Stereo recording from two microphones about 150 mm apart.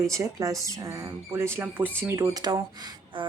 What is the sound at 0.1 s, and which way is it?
Speech, 20° right (ahead or behind).